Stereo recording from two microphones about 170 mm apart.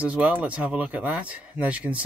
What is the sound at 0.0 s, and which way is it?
Speech, 10° right (ahead or behind).